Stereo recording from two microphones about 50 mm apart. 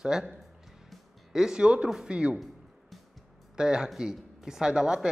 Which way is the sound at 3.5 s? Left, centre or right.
Centre.